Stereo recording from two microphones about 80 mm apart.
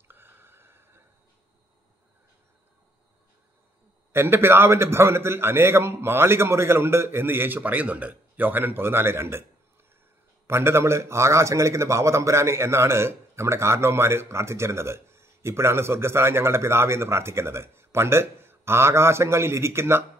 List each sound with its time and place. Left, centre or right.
0.1 s a sound: right
4.1 s a man's voice: right
10.4 s a man's voice: right